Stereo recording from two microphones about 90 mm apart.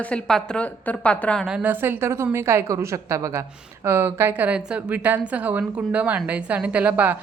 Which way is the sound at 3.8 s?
25° right (ahead or behind).